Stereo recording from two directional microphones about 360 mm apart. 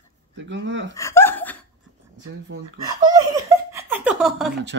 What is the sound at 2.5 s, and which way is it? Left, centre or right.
Speech, right.